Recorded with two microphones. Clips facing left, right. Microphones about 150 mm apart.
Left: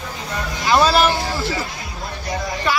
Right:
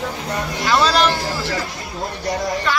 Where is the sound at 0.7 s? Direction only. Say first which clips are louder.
Left 2 dB; 10° left (ahead or behind).